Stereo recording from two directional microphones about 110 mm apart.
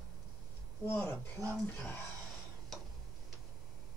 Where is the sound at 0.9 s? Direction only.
20° left (ahead or behind).